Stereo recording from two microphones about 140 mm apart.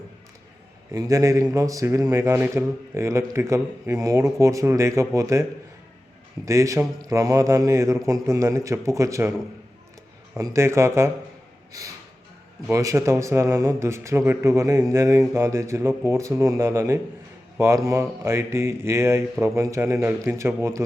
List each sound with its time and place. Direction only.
0.9 s speech: 25° right (ahead or behind)
10.3 s speech: 20° right (ahead or behind)
12.7 s speech: 20° right (ahead or behind)